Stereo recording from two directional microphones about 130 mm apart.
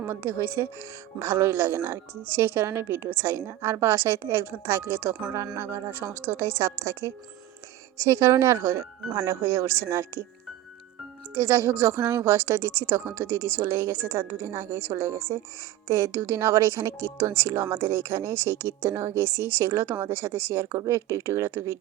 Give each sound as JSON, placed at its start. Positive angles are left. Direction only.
{"t": 0.0, "sound": "speech", "side_deg": -15}
{"t": 11.3, "sound": "speech", "side_deg": -20}